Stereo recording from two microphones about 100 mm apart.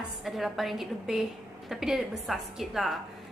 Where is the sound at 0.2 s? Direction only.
Centre (ahead or behind).